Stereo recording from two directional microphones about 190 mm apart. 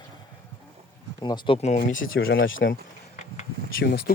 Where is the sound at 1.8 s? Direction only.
45° left (ahead or behind).